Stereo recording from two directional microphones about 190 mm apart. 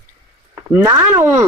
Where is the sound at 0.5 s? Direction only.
10° right (ahead or behind).